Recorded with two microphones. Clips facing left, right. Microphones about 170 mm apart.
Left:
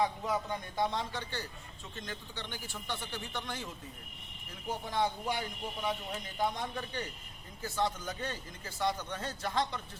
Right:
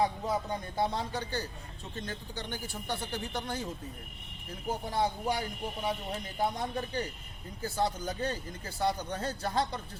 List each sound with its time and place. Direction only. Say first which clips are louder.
0.0 s speech: right 2 dB; 35° right (ahead or behind)
4.9 s speech: right 2 dB; 35° right (ahead or behind)